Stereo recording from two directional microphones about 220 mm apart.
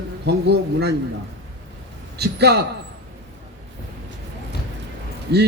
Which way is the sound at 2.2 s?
50° right (ahead or behind).